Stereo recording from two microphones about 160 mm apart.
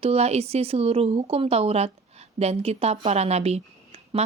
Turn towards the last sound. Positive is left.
turn(degrees=-40)  # may be behind; listen again after turning